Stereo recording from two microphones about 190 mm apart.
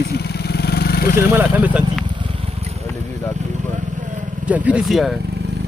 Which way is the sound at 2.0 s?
30° right (ahead or behind).